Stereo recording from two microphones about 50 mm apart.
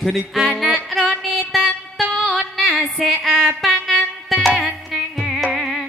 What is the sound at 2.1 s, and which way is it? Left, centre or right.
Music, centre.